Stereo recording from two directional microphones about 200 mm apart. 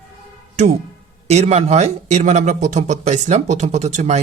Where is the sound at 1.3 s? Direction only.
35° right (ahead or behind).